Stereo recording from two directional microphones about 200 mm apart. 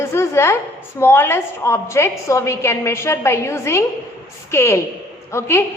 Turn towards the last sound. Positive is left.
turn(degrees=15)  # may be behind; listen again after turning